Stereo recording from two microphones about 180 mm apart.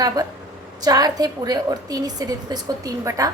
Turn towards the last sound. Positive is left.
turn(degrees=-20)  # may be behind; listen again after turning